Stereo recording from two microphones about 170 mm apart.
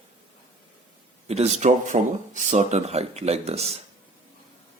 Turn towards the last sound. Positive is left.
turn(degrees=-40)  # may be behind; listen again after turning